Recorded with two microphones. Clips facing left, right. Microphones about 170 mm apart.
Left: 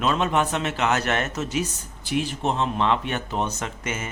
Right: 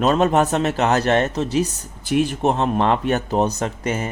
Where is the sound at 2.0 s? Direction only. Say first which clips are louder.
Right 6 dB; 50° right (ahead or behind); by 4.1 s 35° right (ahead or behind).